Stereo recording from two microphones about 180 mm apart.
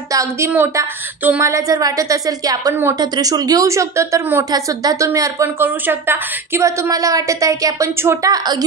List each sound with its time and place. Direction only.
0.1 s a woman's voice: 15° right (ahead or behind)